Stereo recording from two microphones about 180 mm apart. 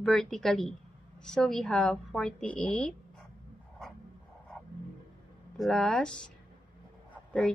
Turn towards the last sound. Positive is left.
turn(degrees=10)  # may be behind; listen again after turning